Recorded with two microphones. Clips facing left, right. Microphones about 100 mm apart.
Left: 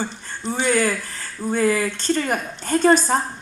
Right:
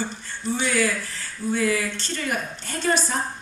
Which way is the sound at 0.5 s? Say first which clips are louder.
Left 3 dB; 45° left (ahead or behind).